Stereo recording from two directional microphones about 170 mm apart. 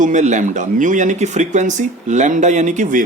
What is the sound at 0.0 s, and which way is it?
Speech, 45° right (ahead or behind).